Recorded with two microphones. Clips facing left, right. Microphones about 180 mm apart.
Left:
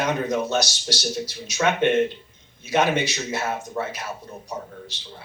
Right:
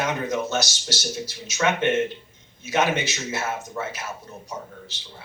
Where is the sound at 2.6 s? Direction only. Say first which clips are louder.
Left 2 dB; 15° left (ahead or behind).